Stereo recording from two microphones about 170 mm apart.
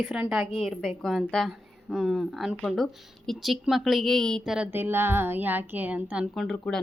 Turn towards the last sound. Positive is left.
turn(degrees=0)  # may be behind; listen again after turning